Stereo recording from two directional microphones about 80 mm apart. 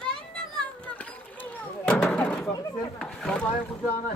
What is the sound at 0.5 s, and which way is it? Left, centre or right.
Children playing, centre.